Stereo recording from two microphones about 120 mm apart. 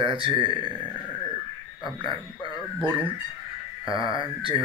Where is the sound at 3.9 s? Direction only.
45° right (ahead or behind).